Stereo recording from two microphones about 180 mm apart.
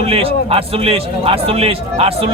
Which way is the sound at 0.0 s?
30° right (ahead or behind).